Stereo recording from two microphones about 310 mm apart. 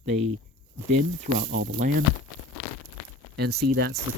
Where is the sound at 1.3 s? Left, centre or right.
Right.